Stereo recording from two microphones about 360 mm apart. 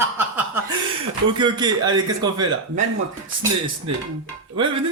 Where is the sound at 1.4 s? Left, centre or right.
Centre.